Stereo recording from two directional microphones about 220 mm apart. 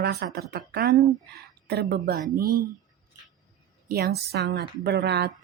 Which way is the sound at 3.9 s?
45° right (ahead or behind).